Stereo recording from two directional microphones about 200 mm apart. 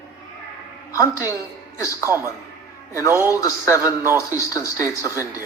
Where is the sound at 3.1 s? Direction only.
15° right (ahead or behind).